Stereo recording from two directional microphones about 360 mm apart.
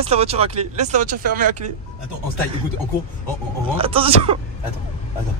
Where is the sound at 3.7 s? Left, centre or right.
Centre.